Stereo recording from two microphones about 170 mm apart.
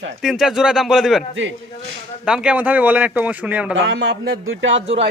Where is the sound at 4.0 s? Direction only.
70° right (ahead or behind); by 4.9 s 90° right.